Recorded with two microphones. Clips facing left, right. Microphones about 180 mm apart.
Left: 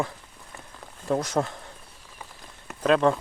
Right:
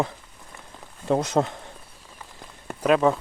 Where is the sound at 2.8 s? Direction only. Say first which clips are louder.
Right 1 dB; 5° right (ahead or behind).